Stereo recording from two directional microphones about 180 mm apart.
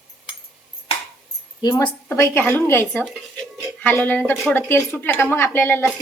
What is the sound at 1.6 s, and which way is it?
Speech, 25° left (ahead or behind).